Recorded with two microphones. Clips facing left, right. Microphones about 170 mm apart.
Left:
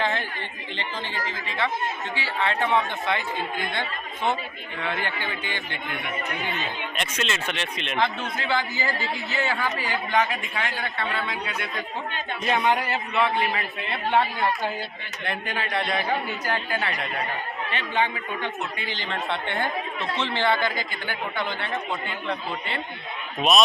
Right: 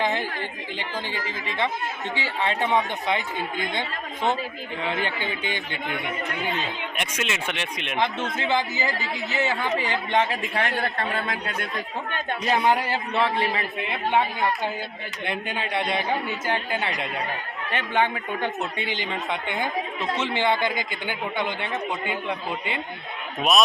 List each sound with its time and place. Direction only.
0.0 s speech: 15° right (ahead or behind)
2.1 s speech: 20° right (ahead or behind)
4.8 s speech: 20° right (ahead or behind)
6.9 s speech: 15° right (ahead or behind); by 10.7 s 35° right (ahead or behind)
10.7 s speech: 50° right (ahead or behind)
12.5 s a man's voice: 35° right (ahead or behind)
13.8 s speech: 15° right (ahead or behind)
17.7 s speech: 50° right (ahead or behind)
18.8 s speech: 15° right (ahead or behind)